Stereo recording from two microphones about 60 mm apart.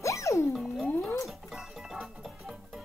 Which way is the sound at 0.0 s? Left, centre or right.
Left.